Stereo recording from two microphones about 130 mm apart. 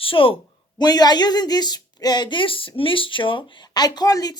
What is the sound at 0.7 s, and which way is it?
Speech, 30° left (ahead or behind).